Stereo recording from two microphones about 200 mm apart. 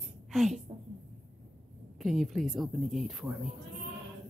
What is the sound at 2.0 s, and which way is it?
A woman's voice, centre (ahead or behind).